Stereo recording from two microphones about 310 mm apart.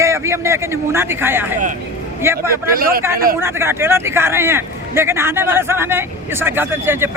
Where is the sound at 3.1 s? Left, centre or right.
Right.